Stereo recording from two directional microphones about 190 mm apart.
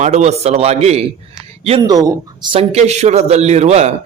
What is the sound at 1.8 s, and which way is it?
Speech, 20° right (ahead or behind).